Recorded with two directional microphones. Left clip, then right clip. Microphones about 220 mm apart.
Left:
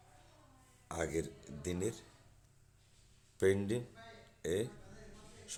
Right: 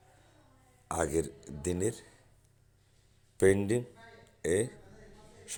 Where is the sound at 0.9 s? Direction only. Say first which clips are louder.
Right 7 dB; 25° right (ahead or behind).